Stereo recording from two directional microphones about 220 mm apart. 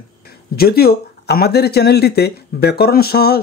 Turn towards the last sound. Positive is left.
turn(degrees=45)  # may be behind; listen again after turning